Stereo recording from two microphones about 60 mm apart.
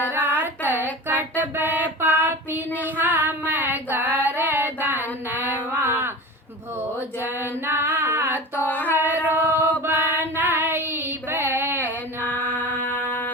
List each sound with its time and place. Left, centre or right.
0.1 s a sound: right
1.0 s child singing: right
3.0 s female singing: right
7.2 s female singing: right
8.5 s female singing: left
9.0 s chant: right
9.8 s female singing: right
12.2 s chant: left
13.1 s music: left